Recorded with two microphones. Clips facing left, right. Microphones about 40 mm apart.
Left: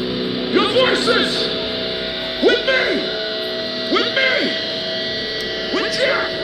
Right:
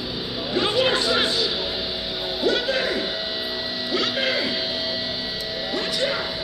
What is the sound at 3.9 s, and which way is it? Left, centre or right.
Music, left.